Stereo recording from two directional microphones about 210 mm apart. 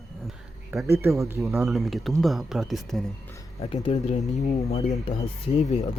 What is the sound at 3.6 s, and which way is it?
Speech, 30° left (ahead or behind).